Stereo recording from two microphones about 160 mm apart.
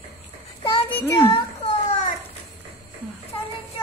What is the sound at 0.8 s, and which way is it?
Child singing, 15° left (ahead or behind).